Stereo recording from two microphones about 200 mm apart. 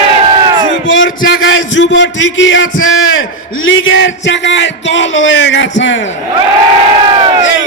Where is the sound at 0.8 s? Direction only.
70° left (ahead or behind).